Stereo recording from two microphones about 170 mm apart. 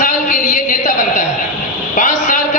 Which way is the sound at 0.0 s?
50° left (ahead or behind).